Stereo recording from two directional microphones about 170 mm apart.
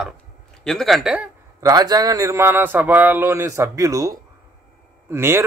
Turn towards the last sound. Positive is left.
turn(degrees=-15)  # may be behind; listen again after turning